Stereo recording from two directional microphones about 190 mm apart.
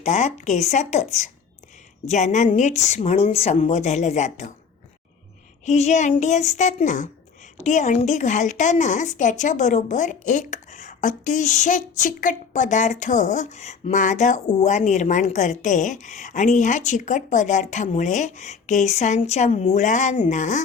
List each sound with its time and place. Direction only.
0.0 s speech: 40° left (ahead or behind)
5.6 s speech: 35° left (ahead or behind)